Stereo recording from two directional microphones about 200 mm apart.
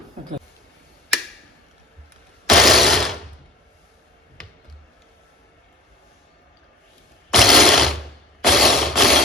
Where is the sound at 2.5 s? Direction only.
Centre (ahead or behind).